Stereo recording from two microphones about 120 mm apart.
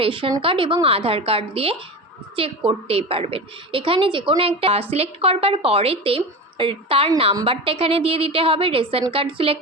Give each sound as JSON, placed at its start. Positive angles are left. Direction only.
{"t": 0.0, "sound": "a woman's voice", "side_deg": -45}